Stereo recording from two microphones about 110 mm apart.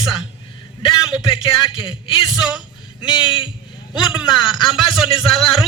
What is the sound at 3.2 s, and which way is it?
Speech, 50° left (ahead or behind).